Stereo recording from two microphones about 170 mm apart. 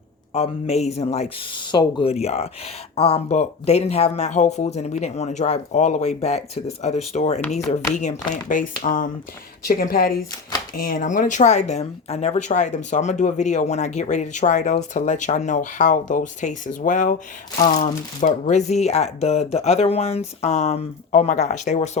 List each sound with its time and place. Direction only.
0.3 s speech: 35° left (ahead or behind)